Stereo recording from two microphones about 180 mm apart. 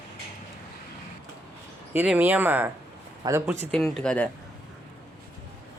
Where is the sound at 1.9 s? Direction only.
10° right (ahead or behind).